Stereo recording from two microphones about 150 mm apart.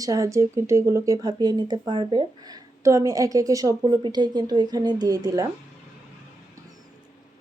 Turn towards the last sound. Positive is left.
turn(degrees=-25)  # may be behind; listen again after turning